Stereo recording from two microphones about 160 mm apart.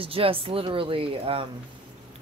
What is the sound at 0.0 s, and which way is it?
A woman's voice, 35° right (ahead or behind).